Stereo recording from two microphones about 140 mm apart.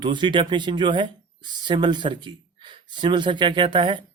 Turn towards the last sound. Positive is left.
turn(degrees=-35)  # may be behind; listen again after turning